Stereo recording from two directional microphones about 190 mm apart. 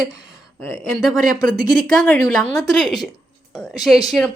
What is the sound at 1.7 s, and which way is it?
A woman's voice, centre (ahead or behind).